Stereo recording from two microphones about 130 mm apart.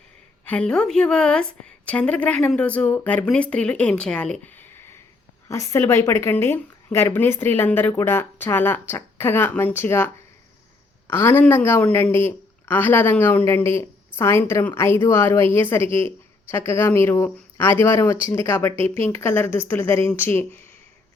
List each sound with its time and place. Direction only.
0.4 s a woman's voice: 10° left (ahead or behind)
11.1 s a woman's voice: 20° left (ahead or behind)